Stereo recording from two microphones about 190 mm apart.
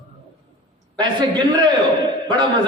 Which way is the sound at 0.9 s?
20° right (ahead or behind).